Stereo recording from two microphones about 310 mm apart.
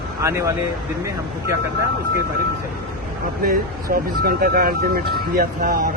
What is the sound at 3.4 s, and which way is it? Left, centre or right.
A man's voice, right.